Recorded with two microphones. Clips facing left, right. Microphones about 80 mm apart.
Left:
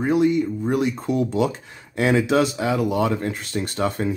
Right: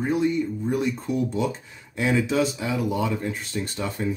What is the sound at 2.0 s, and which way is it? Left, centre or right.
Speech, left.